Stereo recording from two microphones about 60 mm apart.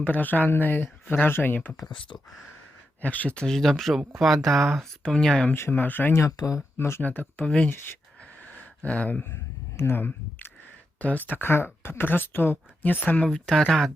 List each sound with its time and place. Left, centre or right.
0.0 s speech: left
3.0 s speech: left
3.3 s speech: centre
5.7 s speech: left
6.3 s speech: left
6.7 s speech: left
7.0 s speech: left
8.8 s speech: left
9.7 s speech: left
11.0 s speech: left
13.6 s speech: centre